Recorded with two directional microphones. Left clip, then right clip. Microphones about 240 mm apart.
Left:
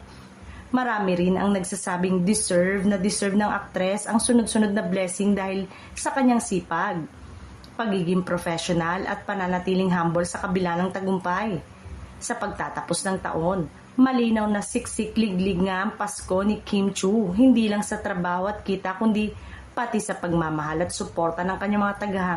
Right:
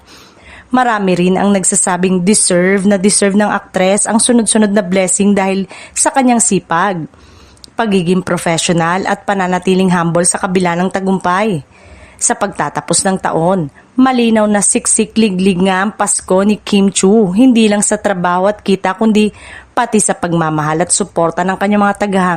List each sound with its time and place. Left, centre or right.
0.7 s a woman's voice: right